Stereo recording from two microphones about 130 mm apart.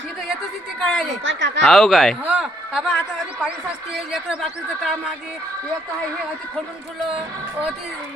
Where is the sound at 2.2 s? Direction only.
5° right (ahead or behind).